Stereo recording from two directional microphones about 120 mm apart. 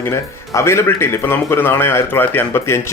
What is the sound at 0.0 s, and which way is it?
Speech, 20° left (ahead or behind).